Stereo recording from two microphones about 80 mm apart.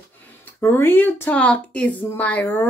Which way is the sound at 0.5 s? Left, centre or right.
Left.